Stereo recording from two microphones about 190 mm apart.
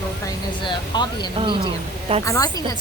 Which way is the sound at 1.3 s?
25° right (ahead or behind).